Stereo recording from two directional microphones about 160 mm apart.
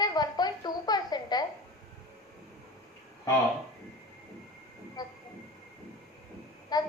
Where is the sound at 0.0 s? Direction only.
25° left (ahead or behind).